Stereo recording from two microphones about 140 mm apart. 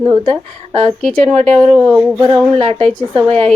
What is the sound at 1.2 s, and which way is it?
Speech, 50° right (ahead or behind).